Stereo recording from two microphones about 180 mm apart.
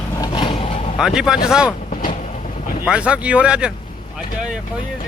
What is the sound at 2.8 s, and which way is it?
Speech, 5° right (ahead or behind).